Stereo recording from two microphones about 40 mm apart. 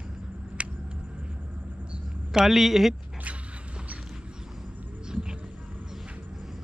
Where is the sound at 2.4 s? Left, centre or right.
Centre.